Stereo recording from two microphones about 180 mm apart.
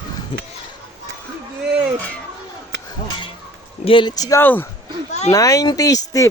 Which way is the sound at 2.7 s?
75° right (ahead or behind).